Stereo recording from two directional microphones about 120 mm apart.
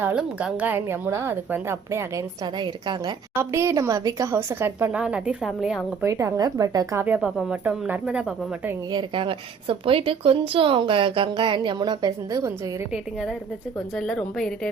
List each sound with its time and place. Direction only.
0.0 s a woman's voice: 10° right (ahead or behind); by 3.2 s 35° right (ahead or behind)
3.3 s a woman's voice: 25° right (ahead or behind); by 5.8 s centre (ahead or behind)
6.0 s a woman's voice: 25° right (ahead or behind)
7.2 s a woman's voice: 5° right (ahead or behind)
8.9 s a woman's voice: 40° right (ahead or behind)
12.9 s a woman's voice: centre (ahead or behind)